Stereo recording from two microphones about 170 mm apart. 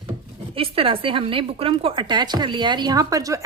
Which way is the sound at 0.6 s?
35° right (ahead or behind).